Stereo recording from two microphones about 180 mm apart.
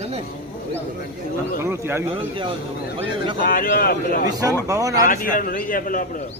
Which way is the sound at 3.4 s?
50° left (ahead or behind).